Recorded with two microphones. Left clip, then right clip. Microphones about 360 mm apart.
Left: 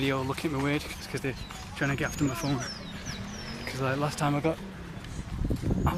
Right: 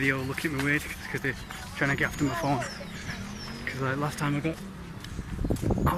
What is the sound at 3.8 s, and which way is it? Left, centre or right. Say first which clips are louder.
Speech: left 2 dB; centre.